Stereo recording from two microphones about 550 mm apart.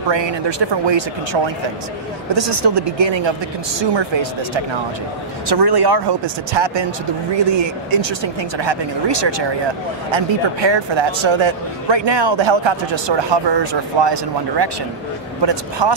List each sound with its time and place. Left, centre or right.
0.1 s a man's voice: right
5.5 s a man's voice: right